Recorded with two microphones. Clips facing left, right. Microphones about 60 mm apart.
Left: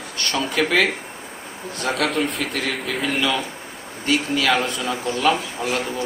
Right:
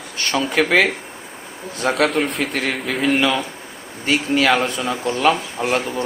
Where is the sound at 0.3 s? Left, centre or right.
Right.